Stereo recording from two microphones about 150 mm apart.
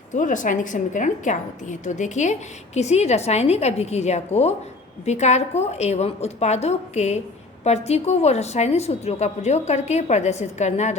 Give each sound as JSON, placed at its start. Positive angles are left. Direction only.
{"t": 0.1, "sound": "a woman's voice", "side_deg": 60}